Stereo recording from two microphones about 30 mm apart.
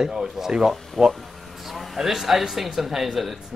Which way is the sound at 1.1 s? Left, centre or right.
Centre.